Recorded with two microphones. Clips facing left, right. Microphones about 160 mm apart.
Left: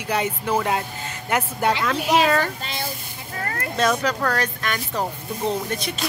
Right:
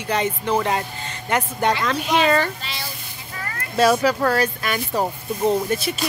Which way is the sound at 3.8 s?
10° right (ahead or behind).